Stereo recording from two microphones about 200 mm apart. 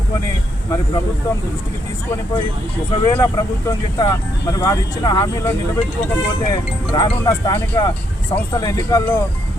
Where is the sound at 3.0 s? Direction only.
20° left (ahead or behind).